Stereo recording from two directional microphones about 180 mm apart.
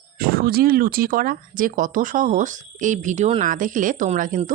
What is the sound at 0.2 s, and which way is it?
Speech, 55° right (ahead or behind).